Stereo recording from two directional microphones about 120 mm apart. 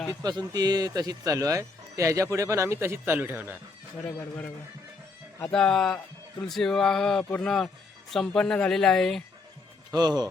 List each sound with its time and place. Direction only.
0.1 s speech: 35° right (ahead or behind); by 3.6 s 15° right (ahead or behind)
4.0 s speech: 15° left (ahead or behind)
9.9 s speech: 35° right (ahead or behind)